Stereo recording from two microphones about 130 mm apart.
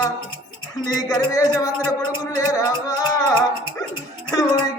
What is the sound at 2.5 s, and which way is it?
Music, 25° left (ahead or behind).